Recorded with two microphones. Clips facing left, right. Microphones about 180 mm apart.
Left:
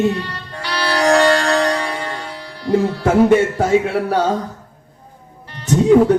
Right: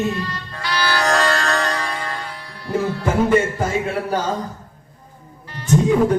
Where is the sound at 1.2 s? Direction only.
30° left (ahead or behind).